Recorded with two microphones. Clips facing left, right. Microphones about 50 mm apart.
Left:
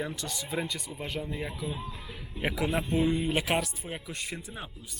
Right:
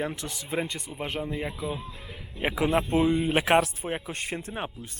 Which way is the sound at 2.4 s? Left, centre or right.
Right.